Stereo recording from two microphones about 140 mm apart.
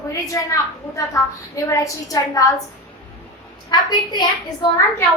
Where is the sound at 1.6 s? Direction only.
25° left (ahead or behind).